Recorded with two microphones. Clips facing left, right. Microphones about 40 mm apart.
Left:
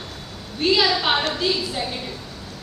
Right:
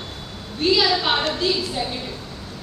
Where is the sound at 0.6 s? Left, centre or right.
Centre.